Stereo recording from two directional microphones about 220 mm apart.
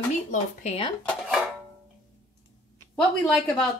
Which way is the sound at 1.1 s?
Centre (ahead or behind).